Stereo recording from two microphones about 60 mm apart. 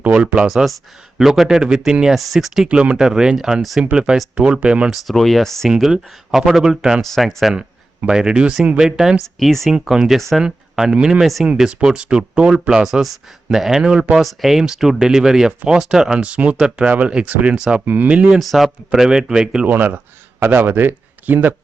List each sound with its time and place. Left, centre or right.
0.0 s speech: centre
2.6 s speech: centre
5.0 s speech: centre
5.7 s speech: centre
7.0 s speech: centre
8.0 s speech: centre
9.2 s speech: centre
9.9 s speech: centre
10.2 s speech: centre
10.4 s speech: centre
14.2 s speech: centre; by 18.3 s right
18.3 s speech: centre
19.6 s a man's voice: right